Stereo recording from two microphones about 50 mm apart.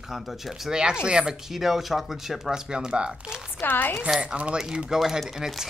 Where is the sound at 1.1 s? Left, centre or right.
Centre.